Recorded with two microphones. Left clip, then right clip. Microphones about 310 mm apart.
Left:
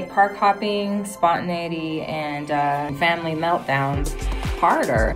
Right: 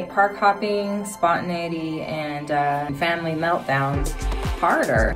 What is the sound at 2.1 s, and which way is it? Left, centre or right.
Speech, left.